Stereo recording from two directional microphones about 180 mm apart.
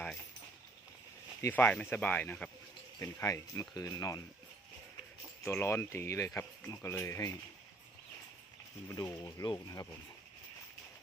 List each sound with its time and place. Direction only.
1.4 s speech: 10° left (ahead or behind)
5.5 s speech: 15° left (ahead or behind)
8.9 s speech: 15° left (ahead or behind)